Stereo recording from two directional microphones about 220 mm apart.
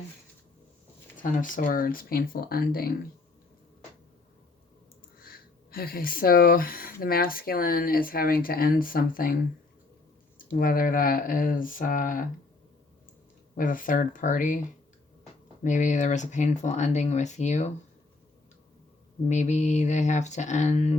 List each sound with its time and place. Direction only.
1.2 s speech: 35° left (ahead or behind)
5.2 s speech: 40° left (ahead or behind)
13.6 s speech: 35° left (ahead or behind)
15.6 s speech: 35° left (ahead or behind)
19.3 s speech: 30° left (ahead or behind)